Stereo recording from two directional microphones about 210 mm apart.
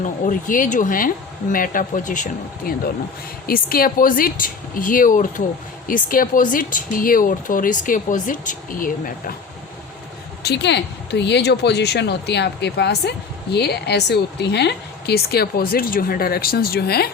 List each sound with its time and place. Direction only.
0.0 s speech: 40° left (ahead or behind)
10.4 s speech: 55° left (ahead or behind)